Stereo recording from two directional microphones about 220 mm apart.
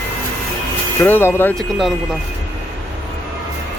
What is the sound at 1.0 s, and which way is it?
Speech, 10° left (ahead or behind).